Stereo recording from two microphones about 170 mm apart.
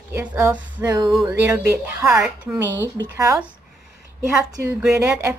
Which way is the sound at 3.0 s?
20° right (ahead or behind).